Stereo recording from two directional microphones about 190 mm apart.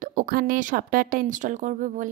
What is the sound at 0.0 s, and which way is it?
A woman's voice, 45° right (ahead or behind).